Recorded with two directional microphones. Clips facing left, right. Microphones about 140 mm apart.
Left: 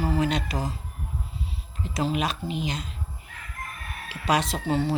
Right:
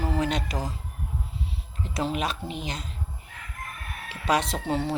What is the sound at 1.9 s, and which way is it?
Speech, 55° right (ahead or behind).